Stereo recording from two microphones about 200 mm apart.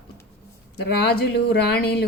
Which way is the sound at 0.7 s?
55° left (ahead or behind).